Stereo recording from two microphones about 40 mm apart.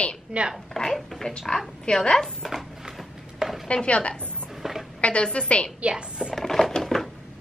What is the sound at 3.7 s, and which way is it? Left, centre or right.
Speech, left.